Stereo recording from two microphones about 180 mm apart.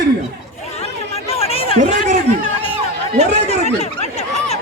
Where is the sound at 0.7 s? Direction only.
35° left (ahead or behind).